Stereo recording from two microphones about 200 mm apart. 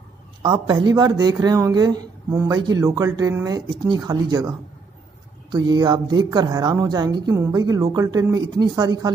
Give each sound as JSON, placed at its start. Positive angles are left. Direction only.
{"t": 0.4, "sound": "speech", "side_deg": -25}